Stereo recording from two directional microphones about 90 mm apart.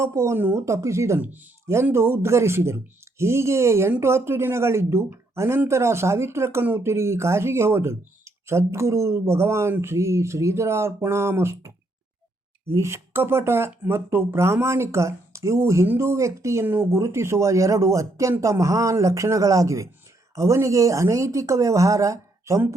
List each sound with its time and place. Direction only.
0.0 s speech: 30° right (ahead or behind)